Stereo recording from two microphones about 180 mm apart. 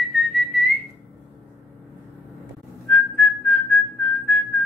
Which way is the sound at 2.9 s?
5° left (ahead or behind).